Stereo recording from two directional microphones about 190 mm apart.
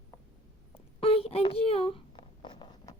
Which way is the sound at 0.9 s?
30° left (ahead or behind).